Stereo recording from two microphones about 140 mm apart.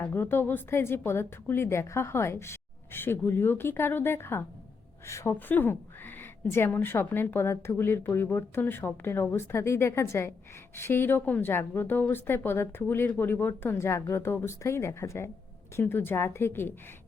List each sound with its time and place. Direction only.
0.0 s a woman's voice: 15° left (ahead or behind)